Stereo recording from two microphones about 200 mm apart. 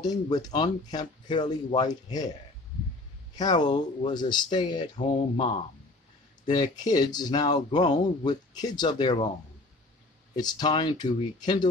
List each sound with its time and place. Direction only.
0.0 s speech: 20° left (ahead or behind)
3.3 s speech: 20° left (ahead or behind)
4.9 s speech: 35° left (ahead or behind)
6.4 s speech: 25° left (ahead or behind)
10.3 s speech: 20° left (ahead or behind)